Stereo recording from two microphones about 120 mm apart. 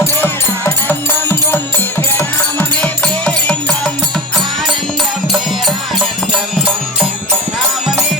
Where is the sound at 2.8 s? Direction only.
10° left (ahead or behind).